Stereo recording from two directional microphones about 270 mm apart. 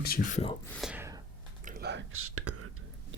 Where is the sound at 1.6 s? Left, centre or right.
Right.